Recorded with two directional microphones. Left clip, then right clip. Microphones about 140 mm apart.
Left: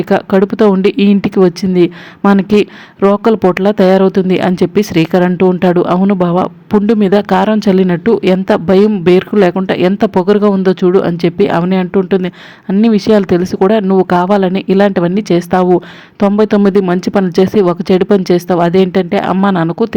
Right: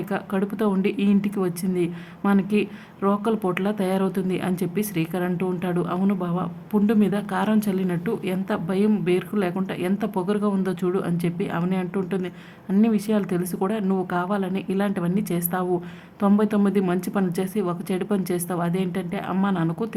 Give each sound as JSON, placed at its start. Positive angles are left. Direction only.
{"t": 0.1, "sound": "speech", "side_deg": 50}